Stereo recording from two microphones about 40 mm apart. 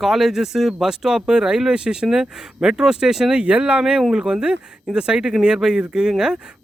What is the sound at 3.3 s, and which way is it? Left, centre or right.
Speech, right.